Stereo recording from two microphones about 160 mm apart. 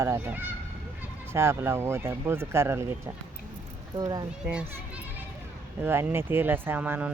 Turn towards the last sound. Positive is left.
turn(degrees=-10)  # may be behind; listen again after turning